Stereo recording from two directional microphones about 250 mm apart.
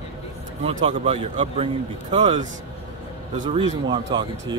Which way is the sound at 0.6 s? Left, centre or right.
Right.